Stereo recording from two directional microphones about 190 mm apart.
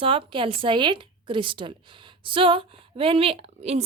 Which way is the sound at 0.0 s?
30° right (ahead or behind).